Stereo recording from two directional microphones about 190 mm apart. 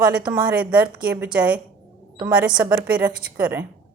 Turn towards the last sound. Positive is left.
turn(degrees=-10)  # may be behind; listen again after turning